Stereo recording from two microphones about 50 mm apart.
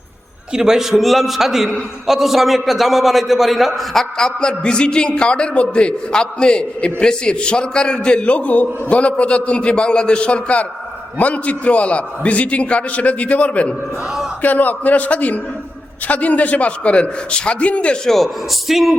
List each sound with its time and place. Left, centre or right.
0.5 s a man's voice: centre
4.2 s a man's voice: centre
18.0 s a man's voice: centre